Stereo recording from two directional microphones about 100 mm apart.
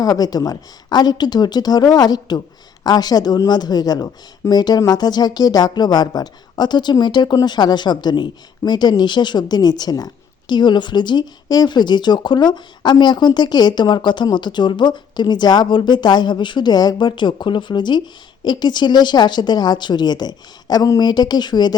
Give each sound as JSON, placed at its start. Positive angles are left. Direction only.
{"t": 0.0, "sound": "speech", "side_deg": 40}